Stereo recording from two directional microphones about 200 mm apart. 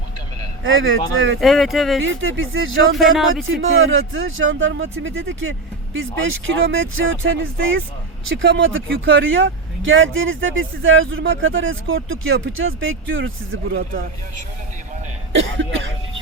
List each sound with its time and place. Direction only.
0.6 s speech: 75° right (ahead or behind)
1.4 s speech: centre (ahead or behind)
2.0 s speech: 75° right (ahead or behind)
3.0 s speech: centre (ahead or behind)
3.6 s speech: 90° right
15.4 s speech: 70° right (ahead or behind)